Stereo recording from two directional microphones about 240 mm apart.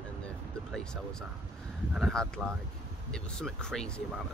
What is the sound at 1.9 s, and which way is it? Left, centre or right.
Speech, centre.